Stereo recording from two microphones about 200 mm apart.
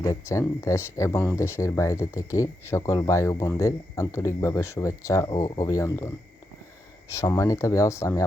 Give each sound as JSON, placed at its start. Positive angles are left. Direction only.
{"t": 0.0, "sound": "speech", "side_deg": 15}
{"t": 7.1, "sound": "speech", "side_deg": 15}